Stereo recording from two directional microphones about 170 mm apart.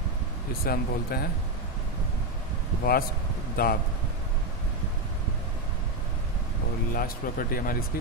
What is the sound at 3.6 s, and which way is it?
Speech, 60° left (ahead or behind).